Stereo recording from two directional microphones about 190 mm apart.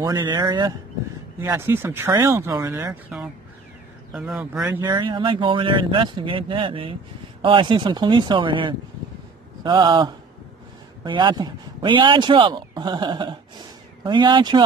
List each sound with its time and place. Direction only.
0.0 s speech: 20° right (ahead or behind); by 4.8 s 5° right (ahead or behind)
4.8 s speech: 25° right (ahead or behind)